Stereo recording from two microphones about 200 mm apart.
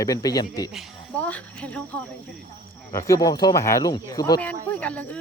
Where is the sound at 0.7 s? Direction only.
5° left (ahead or behind).